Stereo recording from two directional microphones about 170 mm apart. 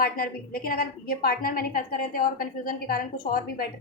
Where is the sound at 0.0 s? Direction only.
60° left (ahead or behind).